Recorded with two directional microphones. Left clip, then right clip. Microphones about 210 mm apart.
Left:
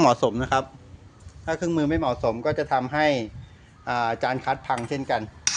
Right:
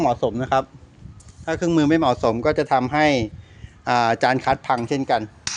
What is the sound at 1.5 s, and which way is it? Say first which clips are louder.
A man's voice: right 5 dB; 40° right (ahead or behind).